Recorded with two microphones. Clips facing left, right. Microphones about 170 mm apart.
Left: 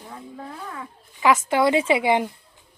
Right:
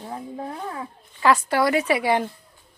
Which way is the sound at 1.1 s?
15° left (ahead or behind).